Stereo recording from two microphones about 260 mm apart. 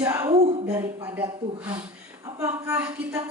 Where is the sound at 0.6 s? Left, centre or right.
Centre.